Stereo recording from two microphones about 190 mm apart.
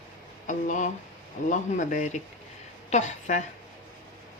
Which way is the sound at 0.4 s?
40° left (ahead or behind).